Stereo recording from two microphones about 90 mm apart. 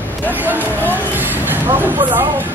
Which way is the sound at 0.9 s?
20° right (ahead or behind).